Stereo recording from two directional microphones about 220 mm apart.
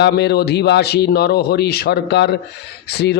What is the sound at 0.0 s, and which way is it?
A man's voice, 50° left (ahead or behind).